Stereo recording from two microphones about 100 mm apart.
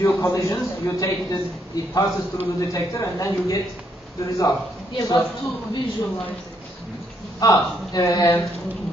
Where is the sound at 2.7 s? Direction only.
30° left (ahead or behind).